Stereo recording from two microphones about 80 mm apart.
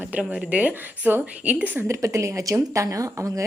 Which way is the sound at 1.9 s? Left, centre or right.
Right.